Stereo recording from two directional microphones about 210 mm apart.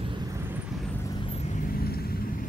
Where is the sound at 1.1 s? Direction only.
25° left (ahead or behind).